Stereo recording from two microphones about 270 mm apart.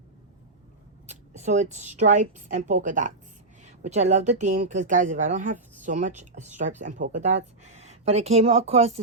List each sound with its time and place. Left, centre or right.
1.0 s speech: right